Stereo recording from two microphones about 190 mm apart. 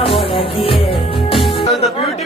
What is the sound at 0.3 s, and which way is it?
Music, 30° left (ahead or behind).